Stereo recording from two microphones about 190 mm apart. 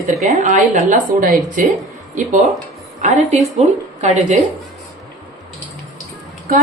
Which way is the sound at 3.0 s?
35° right (ahead or behind).